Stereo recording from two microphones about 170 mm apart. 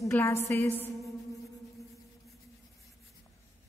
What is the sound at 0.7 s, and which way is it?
Music, 10° left (ahead or behind).